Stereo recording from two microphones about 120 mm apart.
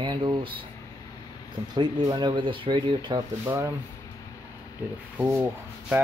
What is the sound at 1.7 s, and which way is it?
Speech, 35° right (ahead or behind).